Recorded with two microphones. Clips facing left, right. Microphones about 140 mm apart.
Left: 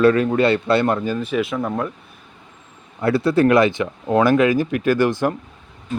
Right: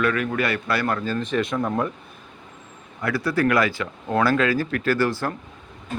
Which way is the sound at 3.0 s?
25° left (ahead or behind).